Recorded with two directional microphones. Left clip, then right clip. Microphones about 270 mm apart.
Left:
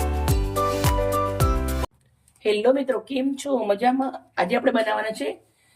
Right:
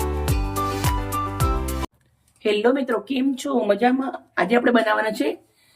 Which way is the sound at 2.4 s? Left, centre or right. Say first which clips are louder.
Even; centre.